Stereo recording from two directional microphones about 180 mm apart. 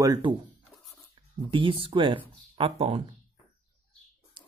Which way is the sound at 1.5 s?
30° right (ahead or behind).